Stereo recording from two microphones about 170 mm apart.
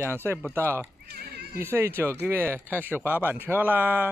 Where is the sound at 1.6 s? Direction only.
15° right (ahead or behind).